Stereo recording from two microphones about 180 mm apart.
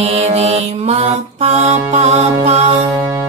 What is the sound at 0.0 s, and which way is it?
Music, 35° right (ahead or behind).